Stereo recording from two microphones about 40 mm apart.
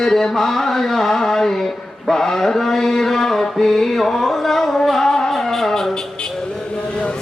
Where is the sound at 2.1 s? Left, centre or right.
Centre.